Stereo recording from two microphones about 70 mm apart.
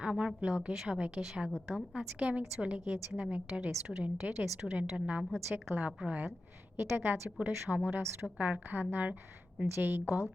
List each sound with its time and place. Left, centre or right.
0.0 s a woman's voice: centre
6.7 s a woman's voice: right